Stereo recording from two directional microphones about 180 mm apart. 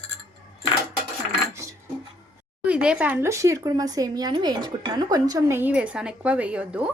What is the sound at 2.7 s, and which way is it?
Speech, 5° right (ahead or behind).